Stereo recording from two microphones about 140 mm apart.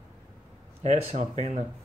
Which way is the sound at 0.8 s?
50° right (ahead or behind).